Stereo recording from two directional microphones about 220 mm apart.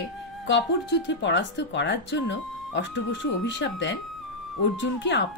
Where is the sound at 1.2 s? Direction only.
55° left (ahead or behind).